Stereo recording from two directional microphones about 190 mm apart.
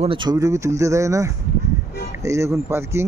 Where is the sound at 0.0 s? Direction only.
25° right (ahead or behind).